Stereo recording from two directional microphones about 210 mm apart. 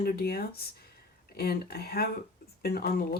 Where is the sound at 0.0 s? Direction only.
45° left (ahead or behind).